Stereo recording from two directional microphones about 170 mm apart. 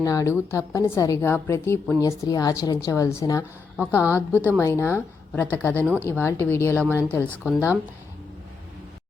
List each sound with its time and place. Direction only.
0.0 s a woman's voice: 20° left (ahead or behind)
5.8 s speech: 10° right (ahead or behind)
6.1 s a woman's voice: 15° left (ahead or behind)